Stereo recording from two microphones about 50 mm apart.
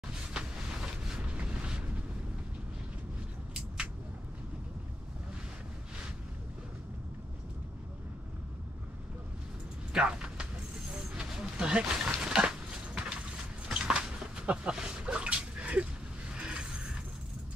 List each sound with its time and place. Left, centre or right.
1.1 s boat: right
3.5 s vehicle: centre
9.9 s speech: centre
11.1 s a sound: centre